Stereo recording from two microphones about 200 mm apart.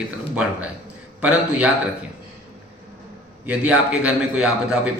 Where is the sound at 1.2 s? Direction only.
5° right (ahead or behind).